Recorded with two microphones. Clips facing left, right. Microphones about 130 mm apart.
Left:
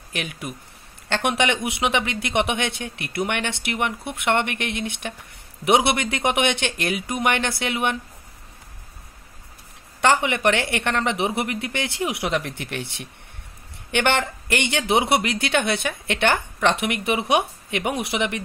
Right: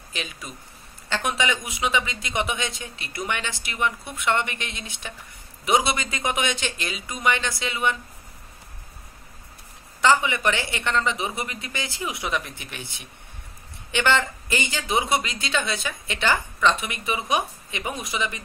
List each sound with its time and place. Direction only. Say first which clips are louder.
0.1 s speech: left 5 dB; 65° left (ahead or behind)
10.0 s speech: left 2 dB; 65° left (ahead or behind)